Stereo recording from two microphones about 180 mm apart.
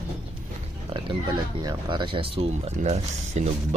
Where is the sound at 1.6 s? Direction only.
25° right (ahead or behind).